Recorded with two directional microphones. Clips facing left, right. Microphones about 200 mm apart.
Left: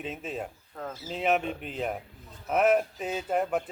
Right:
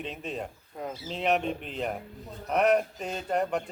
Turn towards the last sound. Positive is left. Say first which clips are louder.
# left 1 dB
turn(degrees=5)  # may be behind; listen again after turning